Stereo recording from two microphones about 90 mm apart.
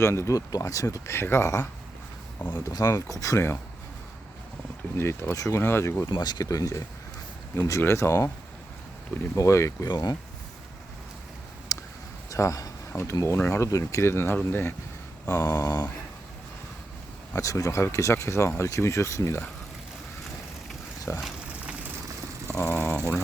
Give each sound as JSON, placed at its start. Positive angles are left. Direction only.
{"t": 0.0, "sound": "speech", "side_deg": 30}
{"t": 4.9, "sound": "speech", "side_deg": 30}
{"t": 6.1, "sound": "speech", "side_deg": 55}
{"t": 7.5, "sound": "speech", "side_deg": 25}
{"t": 9.3, "sound": "speech", "side_deg": 35}
{"t": 9.9, "sound": "speech", "side_deg": 50}
{"t": 11.7, "sound": "a sound", "side_deg": 40}
{"t": 12.3, "sound": "speech", "side_deg": 35}
{"t": 15.3, "sound": "speech", "side_deg": 40}
{"t": 17.3, "sound": "speech", "side_deg": 35}
{"t": 21.1, "sound": "speech", "side_deg": 30}
{"t": 22.5, "sound": "a sound", "side_deg": 25}